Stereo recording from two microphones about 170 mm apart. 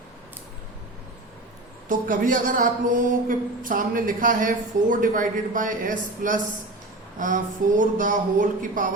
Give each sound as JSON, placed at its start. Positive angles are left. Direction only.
{"t": 1.9, "sound": "speech", "side_deg": -55}